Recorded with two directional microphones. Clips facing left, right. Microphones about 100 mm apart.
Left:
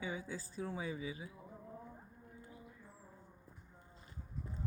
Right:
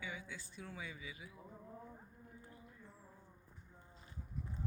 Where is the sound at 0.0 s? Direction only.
35° left (ahead or behind).